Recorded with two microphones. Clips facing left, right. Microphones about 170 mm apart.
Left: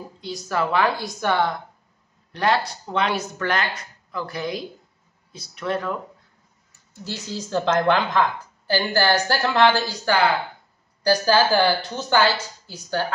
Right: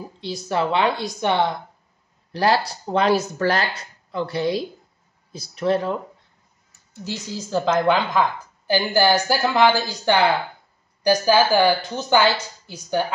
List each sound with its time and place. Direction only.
0.2 s a woman's voice: 25° right (ahead or behind)
2.3 s a woman's voice: 35° right (ahead or behind)
7.4 s a woman's voice: 10° right (ahead or behind)
10.1 s a woman's voice: 20° right (ahead or behind)